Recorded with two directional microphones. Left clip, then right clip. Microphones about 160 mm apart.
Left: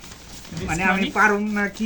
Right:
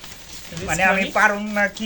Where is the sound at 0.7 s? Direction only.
25° right (ahead or behind).